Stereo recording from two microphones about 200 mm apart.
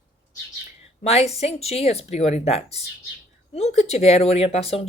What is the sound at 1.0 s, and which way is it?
A woman's voice, 30° left (ahead or behind).